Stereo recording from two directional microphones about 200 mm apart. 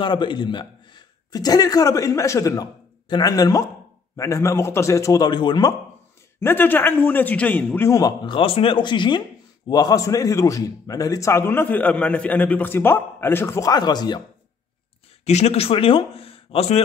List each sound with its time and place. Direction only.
0.0 s a man's voice: 25° left (ahead or behind)
15.2 s speech: 30° left (ahead or behind)